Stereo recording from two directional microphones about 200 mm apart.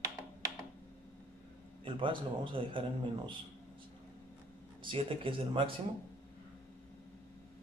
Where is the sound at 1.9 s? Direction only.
25° right (ahead or behind).